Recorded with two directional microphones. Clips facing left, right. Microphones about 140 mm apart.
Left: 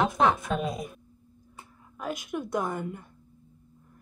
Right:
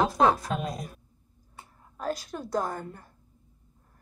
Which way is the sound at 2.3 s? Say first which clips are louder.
Left 4 dB; 5° right (ahead or behind).